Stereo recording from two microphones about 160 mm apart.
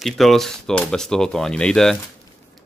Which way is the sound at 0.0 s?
Centre (ahead or behind).